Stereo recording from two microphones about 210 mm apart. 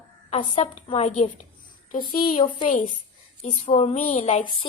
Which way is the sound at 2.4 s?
20° left (ahead or behind).